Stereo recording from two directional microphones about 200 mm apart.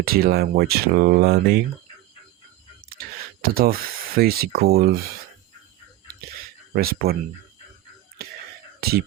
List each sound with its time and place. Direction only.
0.0 s speech: 50° right (ahead or behind)
3.0 s a sound: 45° right (ahead or behind)
3.4 s speech: 45° right (ahead or behind)
6.7 s speech: 50° right (ahead or behind)
8.8 s speech: 50° right (ahead or behind)